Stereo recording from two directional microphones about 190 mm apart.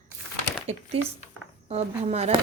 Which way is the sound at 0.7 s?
30° right (ahead or behind).